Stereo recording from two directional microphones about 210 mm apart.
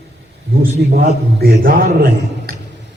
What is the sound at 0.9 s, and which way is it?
A man's voice, 45° right (ahead or behind).